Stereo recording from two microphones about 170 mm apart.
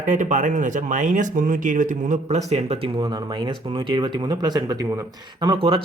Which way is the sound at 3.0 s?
25° right (ahead or behind).